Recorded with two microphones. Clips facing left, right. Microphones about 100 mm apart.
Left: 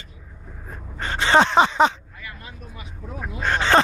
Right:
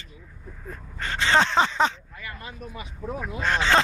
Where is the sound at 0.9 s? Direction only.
15° left (ahead or behind).